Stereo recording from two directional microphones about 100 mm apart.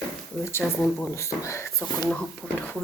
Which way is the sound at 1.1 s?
30° left (ahead or behind).